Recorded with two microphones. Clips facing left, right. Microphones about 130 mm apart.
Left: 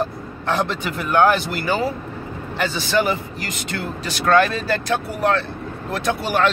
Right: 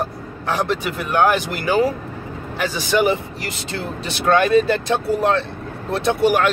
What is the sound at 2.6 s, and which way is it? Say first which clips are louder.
Speech: right 2 dB; 15° right (ahead or behind).